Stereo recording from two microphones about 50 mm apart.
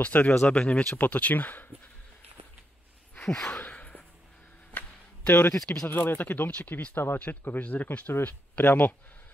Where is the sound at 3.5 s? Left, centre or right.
Left.